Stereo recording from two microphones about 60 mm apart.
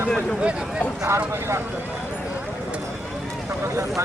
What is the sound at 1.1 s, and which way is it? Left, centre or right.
Speech, right.